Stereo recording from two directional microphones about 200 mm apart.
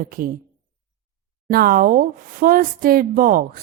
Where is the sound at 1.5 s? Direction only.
50° right (ahead or behind).